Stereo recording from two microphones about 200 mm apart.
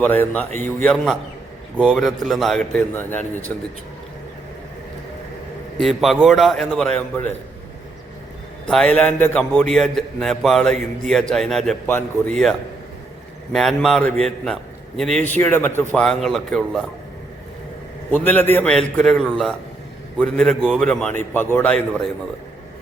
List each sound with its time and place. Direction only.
0.0 s a man's voice: 10° left (ahead or behind)
5.8 s a man's voice: centre (ahead or behind)
8.6 s a man's voice: 5° left (ahead or behind)
13.5 s a man's voice: centre (ahead or behind)
18.1 s a man's voice: 10° left (ahead or behind)